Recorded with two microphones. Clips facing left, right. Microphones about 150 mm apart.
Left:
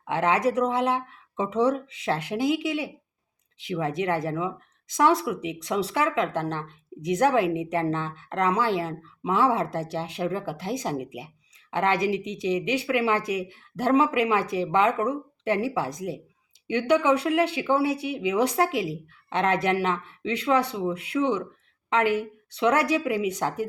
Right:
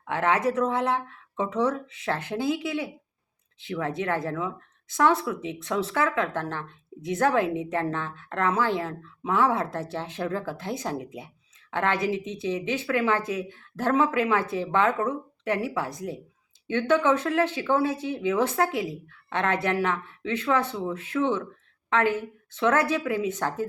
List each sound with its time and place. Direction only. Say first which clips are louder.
0.0 s speech: left 1 dB; 20° left (ahead or behind)